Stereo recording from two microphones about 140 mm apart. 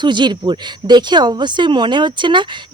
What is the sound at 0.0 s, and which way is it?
Speech, 35° right (ahead or behind).